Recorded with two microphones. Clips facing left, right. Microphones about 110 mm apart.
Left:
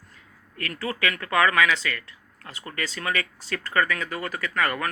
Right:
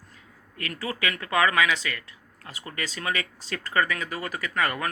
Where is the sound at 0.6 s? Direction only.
20° right (ahead or behind).